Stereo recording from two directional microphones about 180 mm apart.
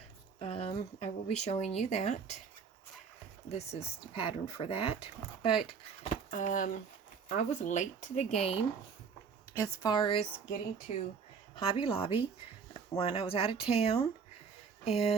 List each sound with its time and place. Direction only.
0.3 s speech: 35° left (ahead or behind)
3.5 s speech: 35° left (ahead or behind)
6.3 s speech: 45° left (ahead or behind)
9.5 s speech: 20° left (ahead or behind)